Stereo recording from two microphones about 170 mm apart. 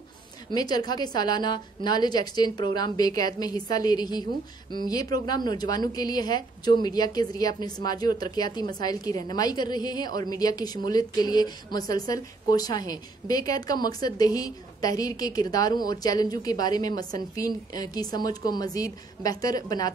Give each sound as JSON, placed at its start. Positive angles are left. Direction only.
{"t": 0.5, "sound": "a woman's voice", "side_deg": 25}